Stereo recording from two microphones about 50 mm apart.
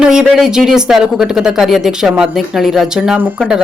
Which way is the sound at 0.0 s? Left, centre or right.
Centre.